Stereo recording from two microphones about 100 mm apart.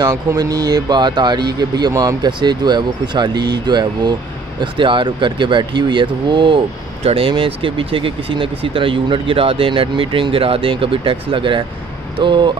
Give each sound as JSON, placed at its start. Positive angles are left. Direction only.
{"t": 0.0, "sound": "speech", "side_deg": -40}